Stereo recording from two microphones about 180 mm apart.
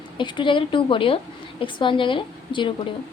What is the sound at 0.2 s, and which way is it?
A woman's voice, 25° left (ahead or behind).